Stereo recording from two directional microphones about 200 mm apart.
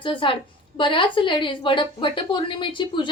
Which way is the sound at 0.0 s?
25° left (ahead or behind).